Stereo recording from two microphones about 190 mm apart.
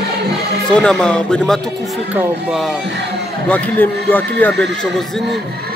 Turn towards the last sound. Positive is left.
turn(degrees=10)  # may be behind; listen again after turning